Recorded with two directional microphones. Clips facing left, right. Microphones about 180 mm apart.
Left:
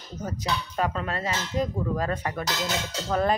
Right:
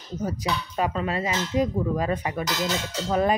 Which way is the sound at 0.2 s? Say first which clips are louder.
Right 2 dB; 10° right (ahead or behind).